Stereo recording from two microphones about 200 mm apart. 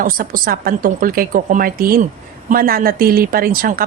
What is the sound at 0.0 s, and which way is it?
A woman's voice, 45° right (ahead or behind).